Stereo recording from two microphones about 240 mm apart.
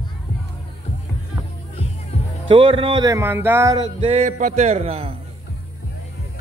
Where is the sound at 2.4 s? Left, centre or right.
Right.